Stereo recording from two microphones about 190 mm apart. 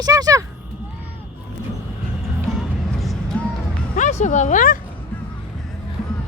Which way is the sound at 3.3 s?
5° left (ahead or behind).